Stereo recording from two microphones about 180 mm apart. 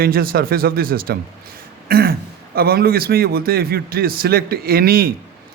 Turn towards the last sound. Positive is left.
turn(degrees=-55)  # may be behind; listen again after turning